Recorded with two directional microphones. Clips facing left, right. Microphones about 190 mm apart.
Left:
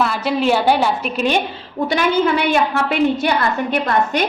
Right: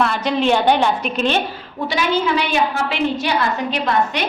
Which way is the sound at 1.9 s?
50° left (ahead or behind).